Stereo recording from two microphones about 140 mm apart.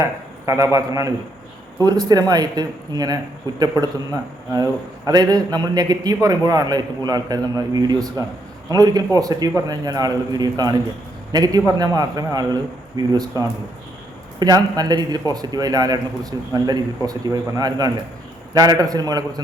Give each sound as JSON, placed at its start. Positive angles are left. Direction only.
{"t": 0.0, "sound": "a man's voice", "side_deg": -20}